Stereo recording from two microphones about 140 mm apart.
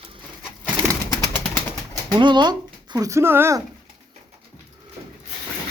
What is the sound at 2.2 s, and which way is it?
Speech, 35° right (ahead or behind).